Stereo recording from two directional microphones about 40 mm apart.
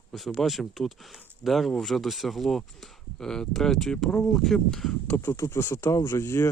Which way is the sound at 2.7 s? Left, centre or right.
Centre.